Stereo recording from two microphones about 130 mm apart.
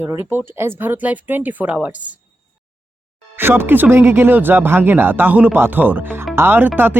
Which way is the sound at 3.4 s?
15° right (ahead or behind).